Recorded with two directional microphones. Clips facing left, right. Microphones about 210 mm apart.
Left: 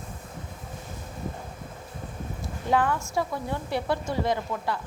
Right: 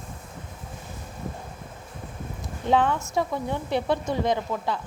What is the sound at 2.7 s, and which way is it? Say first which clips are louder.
A woman's voice: right 2 dB; 20° right (ahead or behind).